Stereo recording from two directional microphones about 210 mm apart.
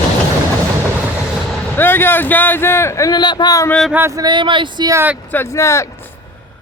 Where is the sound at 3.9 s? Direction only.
15° right (ahead or behind).